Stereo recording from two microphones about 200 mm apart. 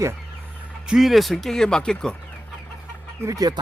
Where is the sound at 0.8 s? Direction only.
Centre (ahead or behind).